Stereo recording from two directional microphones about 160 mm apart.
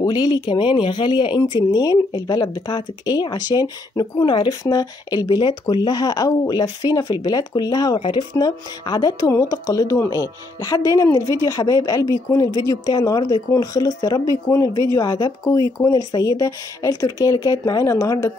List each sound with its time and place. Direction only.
0.0 s speech: 25° left (ahead or behind)